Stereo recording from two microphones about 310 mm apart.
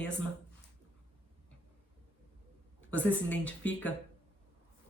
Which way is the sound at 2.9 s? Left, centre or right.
Centre.